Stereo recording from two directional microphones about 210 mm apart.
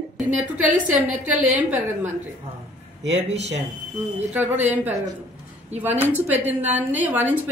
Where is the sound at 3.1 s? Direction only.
30° right (ahead or behind).